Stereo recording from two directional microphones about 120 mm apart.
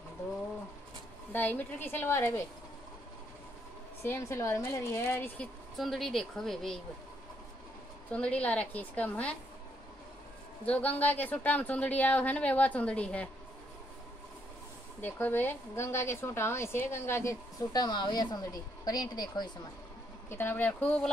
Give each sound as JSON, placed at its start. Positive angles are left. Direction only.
{"t": 1.3, "sound": "speech", "side_deg": 15}
{"t": 4.0, "sound": "a woman's voice", "side_deg": 20}
{"t": 5.8, "sound": "a woman's voice", "side_deg": 0}
{"t": 8.1, "sound": "speech", "side_deg": 10}
{"t": 10.6, "sound": "speech", "side_deg": 10}
{"t": 15.0, "sound": "a woman's voice", "side_deg": 15}
{"t": 20.2, "sound": "speech", "side_deg": 20}